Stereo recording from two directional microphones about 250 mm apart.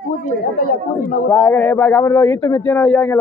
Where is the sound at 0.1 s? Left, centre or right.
Left.